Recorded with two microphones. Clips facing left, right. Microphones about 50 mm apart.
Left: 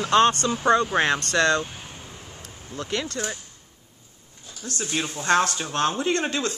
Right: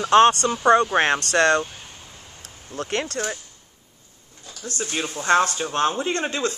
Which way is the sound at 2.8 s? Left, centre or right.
Right.